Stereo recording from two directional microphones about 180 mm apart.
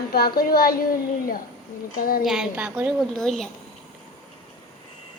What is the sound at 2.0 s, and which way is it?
Speech, 55° left (ahead or behind).